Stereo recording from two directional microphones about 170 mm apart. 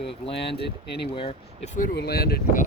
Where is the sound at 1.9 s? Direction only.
70° left (ahead or behind).